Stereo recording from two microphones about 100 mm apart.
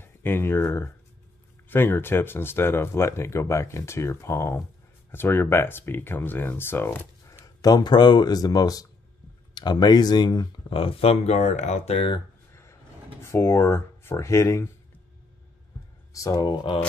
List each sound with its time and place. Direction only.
0.0 s speech: 20° left (ahead or behind)
7.3 s speech: 40° left (ahead or behind)
10.7 s speech: 70° left (ahead or behind); by 12.1 s 90° left
13.2 s speech: 25° left (ahead or behind)
16.1 s speech: 35° left (ahead or behind)